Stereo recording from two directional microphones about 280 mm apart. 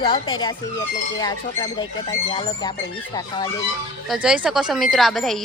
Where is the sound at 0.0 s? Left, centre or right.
Centre.